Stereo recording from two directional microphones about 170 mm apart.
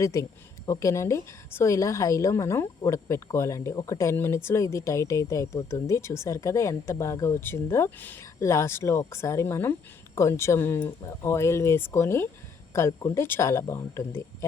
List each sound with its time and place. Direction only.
0.0 s speech: 15° left (ahead or behind)